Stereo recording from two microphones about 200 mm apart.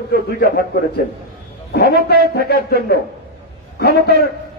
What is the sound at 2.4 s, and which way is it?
A man's voice, 50° left (ahead or behind).